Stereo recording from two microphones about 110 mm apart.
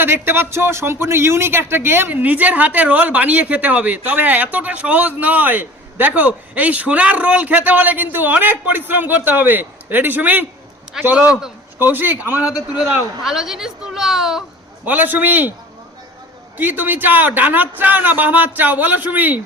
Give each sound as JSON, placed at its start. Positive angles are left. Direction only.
{"t": 0.0, "sound": "a man's voice", "side_deg": -20}
{"t": 14.8, "sound": "a man's voice", "side_deg": -15}
{"t": 16.6, "sound": "a man's voice", "side_deg": -15}